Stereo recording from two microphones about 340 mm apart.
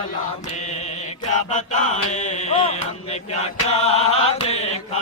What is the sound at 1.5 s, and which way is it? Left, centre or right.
Chant, left.